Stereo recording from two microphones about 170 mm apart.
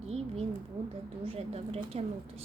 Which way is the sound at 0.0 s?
35° right (ahead or behind).